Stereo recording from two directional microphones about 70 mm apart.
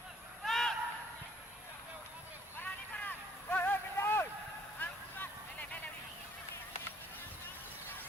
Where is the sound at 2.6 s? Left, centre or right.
Left.